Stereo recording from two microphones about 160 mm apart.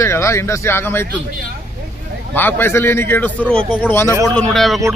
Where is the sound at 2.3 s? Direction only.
15° left (ahead or behind).